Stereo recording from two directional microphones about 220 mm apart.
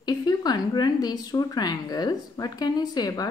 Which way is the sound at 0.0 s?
20° left (ahead or behind).